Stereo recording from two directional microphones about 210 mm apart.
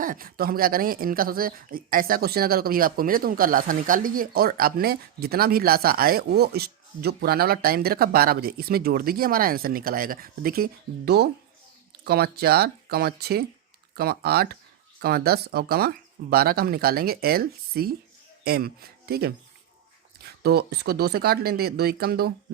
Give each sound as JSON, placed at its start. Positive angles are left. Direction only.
{"t": 0.0, "sound": "a woman's voice", "side_deg": -40}